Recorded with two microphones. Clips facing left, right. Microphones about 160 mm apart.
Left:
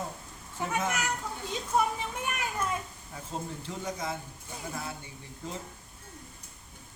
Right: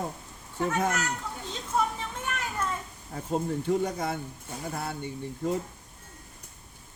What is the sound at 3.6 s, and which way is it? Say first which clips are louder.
Speech: right 8 dB; 60° right (ahead or behind).